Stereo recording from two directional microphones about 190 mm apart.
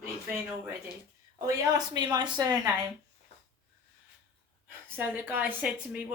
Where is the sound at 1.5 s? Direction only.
20° right (ahead or behind).